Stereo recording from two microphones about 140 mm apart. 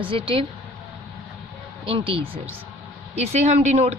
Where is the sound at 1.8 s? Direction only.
40° right (ahead or behind).